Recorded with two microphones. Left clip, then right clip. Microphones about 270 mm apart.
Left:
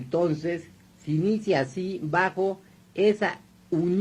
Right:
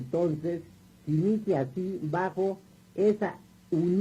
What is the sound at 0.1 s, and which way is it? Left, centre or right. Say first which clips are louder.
Speech: left 3 dB; left.